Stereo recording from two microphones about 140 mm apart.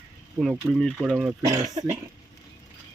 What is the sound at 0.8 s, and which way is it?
Speech, centre (ahead or behind).